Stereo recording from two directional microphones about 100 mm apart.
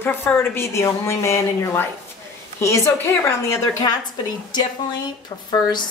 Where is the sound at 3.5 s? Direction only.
35° left (ahead or behind).